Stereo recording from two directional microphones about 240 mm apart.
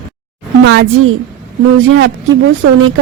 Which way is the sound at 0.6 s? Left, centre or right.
Right.